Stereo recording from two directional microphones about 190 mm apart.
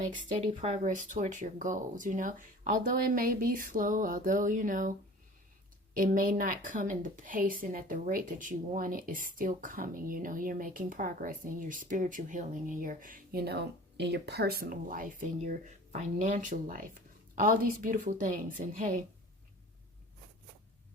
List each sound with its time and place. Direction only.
0.0 s a woman's voice: 35° right (ahead or behind)